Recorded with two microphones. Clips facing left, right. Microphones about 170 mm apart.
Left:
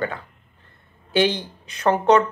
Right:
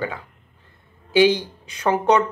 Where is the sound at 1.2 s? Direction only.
10° right (ahead or behind).